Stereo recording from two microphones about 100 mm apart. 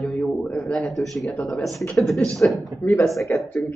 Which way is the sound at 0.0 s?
10° left (ahead or behind).